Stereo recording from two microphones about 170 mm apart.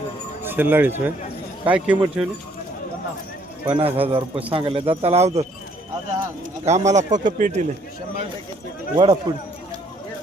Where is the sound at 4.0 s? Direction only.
35° right (ahead or behind).